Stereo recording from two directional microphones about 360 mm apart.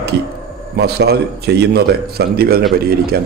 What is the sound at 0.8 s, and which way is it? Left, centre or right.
A man's voice, right.